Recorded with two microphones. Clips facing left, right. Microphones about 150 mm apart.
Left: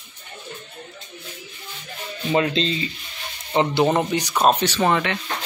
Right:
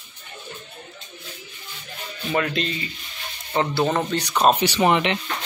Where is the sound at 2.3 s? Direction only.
25° left (ahead or behind).